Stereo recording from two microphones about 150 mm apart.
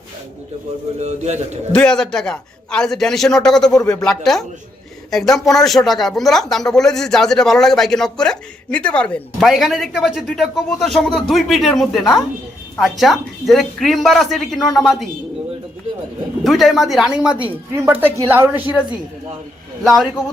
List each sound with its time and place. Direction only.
1.0 s a man's voice: 50° right (ahead or behind)
1.7 s speech: 5° left (ahead or behind)
16.4 s a woman's voice: centre (ahead or behind)
19.8 s speech: centre (ahead or behind)